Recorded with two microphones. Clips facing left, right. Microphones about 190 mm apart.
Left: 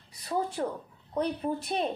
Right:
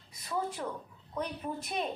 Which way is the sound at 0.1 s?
35° left (ahead or behind).